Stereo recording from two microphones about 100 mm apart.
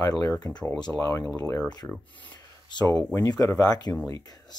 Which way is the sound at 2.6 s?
45° left (ahead or behind).